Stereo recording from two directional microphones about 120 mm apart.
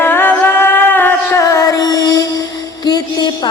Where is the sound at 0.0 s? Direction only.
15° left (ahead or behind).